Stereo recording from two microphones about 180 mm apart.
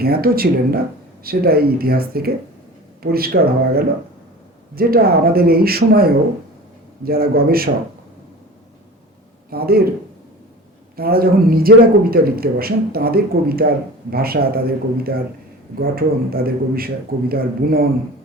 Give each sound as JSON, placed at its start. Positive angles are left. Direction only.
{"t": 0.0, "sound": "a man's voice", "side_deg": -55}
{"t": 9.5, "sound": "a man's voice", "side_deg": -55}
{"t": 10.9, "sound": "a man's voice", "side_deg": -55}